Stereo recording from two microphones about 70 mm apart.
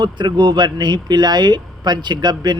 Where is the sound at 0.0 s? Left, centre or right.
Right.